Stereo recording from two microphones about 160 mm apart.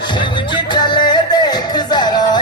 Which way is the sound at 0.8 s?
30° left (ahead or behind).